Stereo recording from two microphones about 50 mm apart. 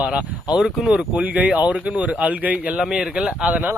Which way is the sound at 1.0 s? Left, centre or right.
Right.